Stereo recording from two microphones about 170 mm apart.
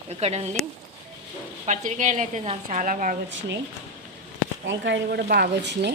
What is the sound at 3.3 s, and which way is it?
Speech, 90° right.